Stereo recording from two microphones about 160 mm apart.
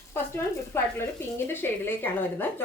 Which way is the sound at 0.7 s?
15° left (ahead or behind).